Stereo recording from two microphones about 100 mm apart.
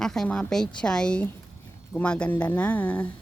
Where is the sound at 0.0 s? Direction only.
5° left (ahead or behind).